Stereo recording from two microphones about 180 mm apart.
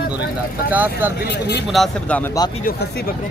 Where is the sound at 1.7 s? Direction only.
Centre (ahead or behind).